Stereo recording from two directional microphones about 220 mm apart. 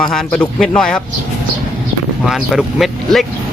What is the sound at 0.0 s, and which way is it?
Speech, 5° left (ahead or behind).